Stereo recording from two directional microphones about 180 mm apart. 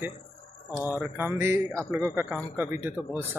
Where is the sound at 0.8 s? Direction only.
10° right (ahead or behind).